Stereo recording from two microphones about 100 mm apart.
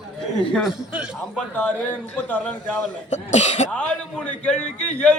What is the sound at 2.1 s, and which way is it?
Speech, 15° left (ahead or behind).